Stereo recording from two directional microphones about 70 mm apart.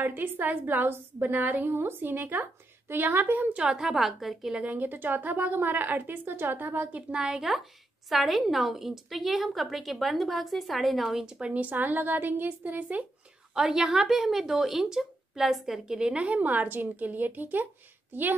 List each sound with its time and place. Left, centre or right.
0.0 s a woman's voice: right
3.5 s a woman's voice: centre
4.6 s a woman's voice: right
11.5 s a woman's voice: right
13.6 s a woman's voice: centre; by 18.3 s right